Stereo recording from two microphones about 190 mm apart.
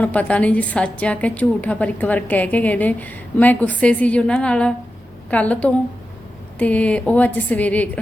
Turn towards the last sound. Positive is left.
turn(degrees=10)  # may be behind; listen again after turning